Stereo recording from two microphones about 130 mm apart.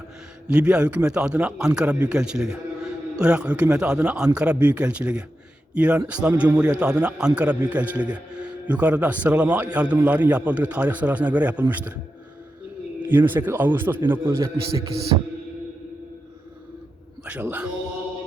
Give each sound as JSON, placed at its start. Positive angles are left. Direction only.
{"t": 0.4, "sound": "a man's voice", "side_deg": -10}
{"t": 13.0, "sound": "a man's voice", "side_deg": -15}
{"t": 17.2, "sound": "a man's voice", "side_deg": -10}